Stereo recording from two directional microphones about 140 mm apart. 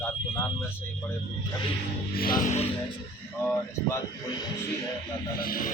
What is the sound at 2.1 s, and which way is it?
Music, 90° left.